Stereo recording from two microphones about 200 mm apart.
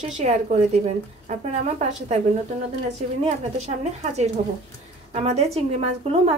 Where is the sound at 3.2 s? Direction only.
35° right (ahead or behind).